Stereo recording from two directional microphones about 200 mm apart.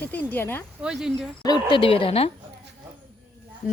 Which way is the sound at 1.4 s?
25° left (ahead or behind).